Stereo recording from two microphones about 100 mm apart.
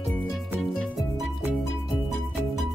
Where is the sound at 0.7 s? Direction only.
5° left (ahead or behind).